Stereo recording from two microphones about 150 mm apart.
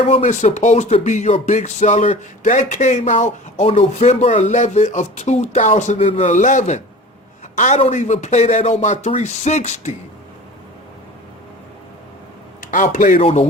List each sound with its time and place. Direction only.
0.2 s speech: 55° left (ahead or behind)
6.3 s a man's voice: 55° left (ahead or behind)
12.7 s a man's voice: 60° left (ahead or behind)
13.1 s speech: 40° left (ahead or behind)